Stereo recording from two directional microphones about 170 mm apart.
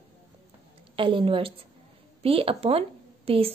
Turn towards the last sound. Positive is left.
turn(degrees=-35)  # may be behind; listen again after turning